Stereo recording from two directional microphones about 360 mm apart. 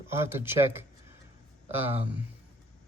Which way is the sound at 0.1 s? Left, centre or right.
Centre.